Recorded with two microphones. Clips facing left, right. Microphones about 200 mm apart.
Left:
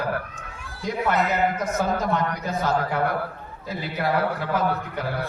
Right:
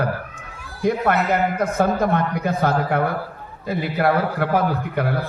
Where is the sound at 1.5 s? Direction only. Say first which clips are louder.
Right 5 dB; 60° right (ahead or behind).